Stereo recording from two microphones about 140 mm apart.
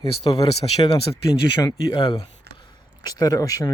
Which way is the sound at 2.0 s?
35° left (ahead or behind).